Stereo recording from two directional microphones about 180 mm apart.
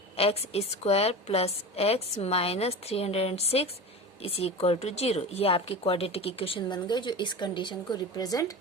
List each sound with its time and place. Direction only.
0.2 s speech: 35° left (ahead or behind)